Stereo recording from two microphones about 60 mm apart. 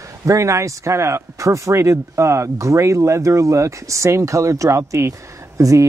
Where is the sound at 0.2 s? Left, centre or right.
Right.